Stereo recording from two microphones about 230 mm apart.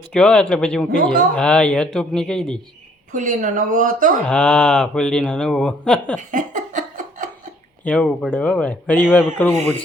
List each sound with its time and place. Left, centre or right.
0.1 s speech: centre
3.1 s speech: right
4.3 s speech: centre
6.1 s a sound: right
7.9 s a man's voice: centre